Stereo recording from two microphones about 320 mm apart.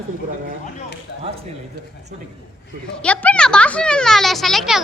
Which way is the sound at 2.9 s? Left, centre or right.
Centre.